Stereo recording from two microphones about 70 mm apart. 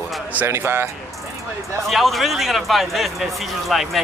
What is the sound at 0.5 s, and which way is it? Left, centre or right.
Speech, right.